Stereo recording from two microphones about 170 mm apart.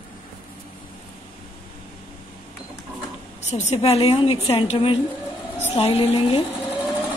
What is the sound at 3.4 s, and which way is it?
A woman's voice, 40° left (ahead or behind).